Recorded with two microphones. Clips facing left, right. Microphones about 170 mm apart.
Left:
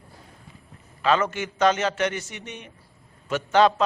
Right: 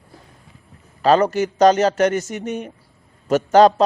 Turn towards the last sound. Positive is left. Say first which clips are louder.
# right 7 dB
turn(degrees=-40)  # may be behind; listen again after turning